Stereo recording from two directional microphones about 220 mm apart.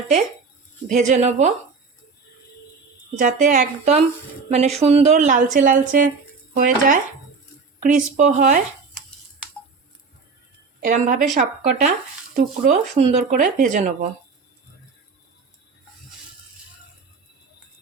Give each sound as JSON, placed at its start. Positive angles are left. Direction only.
{"t": 0.9, "sound": "speech", "side_deg": -35}
{"t": 3.2, "sound": "speech", "side_deg": -35}
{"t": 10.8, "sound": "speech", "side_deg": -35}